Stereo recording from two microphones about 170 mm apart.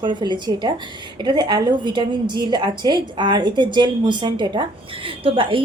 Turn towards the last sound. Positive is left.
turn(degrees=-30)  # may be behind; listen again after turning